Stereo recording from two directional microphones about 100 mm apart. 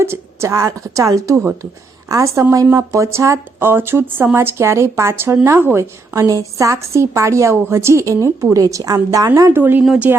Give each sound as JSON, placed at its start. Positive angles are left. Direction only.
{"t": 0.0, "sound": "speech", "side_deg": -25}
{"t": 9.6, "sound": "speech", "side_deg": -20}